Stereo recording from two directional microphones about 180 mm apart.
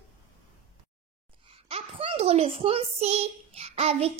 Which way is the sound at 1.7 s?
35° right (ahead or behind).